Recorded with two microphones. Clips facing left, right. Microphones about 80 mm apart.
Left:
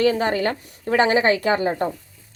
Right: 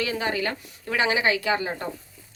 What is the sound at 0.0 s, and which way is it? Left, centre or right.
Speech, left.